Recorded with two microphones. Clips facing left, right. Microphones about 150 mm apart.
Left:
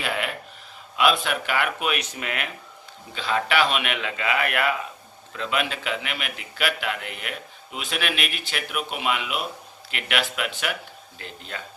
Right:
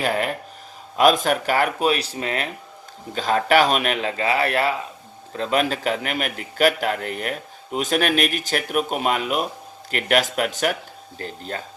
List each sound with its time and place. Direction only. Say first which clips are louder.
0.0 s a man's voice: right 6 dB; 40° right (ahead or behind)